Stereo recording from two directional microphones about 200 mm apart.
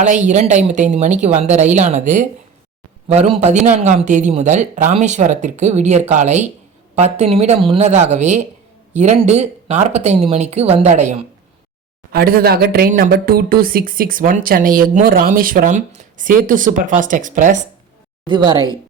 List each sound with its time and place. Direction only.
0.0 s speech: 40° right (ahead or behind)
3.1 s speech: 30° right (ahead or behind)
12.1 s speech: 50° right (ahead or behind)
18.3 s a woman's voice: 20° right (ahead or behind)